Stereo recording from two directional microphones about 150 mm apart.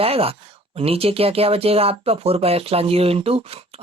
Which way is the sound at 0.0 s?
40° right (ahead or behind).